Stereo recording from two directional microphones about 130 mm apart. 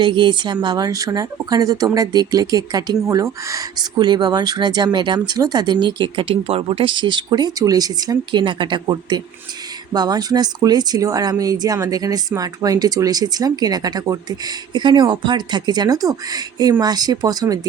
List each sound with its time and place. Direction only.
0.0 s a woman's voice: 35° right (ahead or behind)